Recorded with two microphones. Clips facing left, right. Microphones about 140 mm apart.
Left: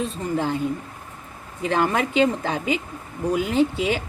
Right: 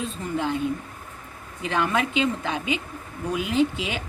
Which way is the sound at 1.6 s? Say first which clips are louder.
Left 3 dB; 40° left (ahead or behind).